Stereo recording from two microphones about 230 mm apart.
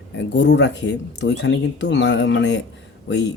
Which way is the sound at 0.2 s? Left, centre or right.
Left.